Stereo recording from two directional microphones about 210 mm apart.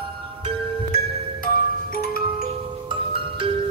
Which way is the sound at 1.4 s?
45° left (ahead or behind).